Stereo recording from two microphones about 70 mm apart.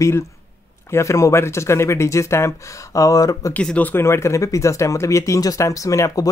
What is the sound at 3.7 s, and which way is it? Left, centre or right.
Speech, left.